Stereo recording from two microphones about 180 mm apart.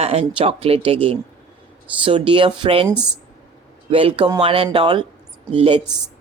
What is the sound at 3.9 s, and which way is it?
Speech, 30° right (ahead or behind).